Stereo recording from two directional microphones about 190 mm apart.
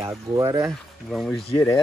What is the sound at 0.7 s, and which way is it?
Speech, centre (ahead or behind).